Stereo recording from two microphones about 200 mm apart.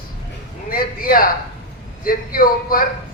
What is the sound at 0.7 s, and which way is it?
A man's voice, 45° left (ahead or behind).